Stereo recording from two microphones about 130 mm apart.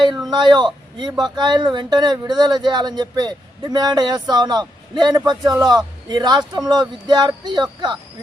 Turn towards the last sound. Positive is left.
turn(degrees=-35)  # may be behind; listen again after turning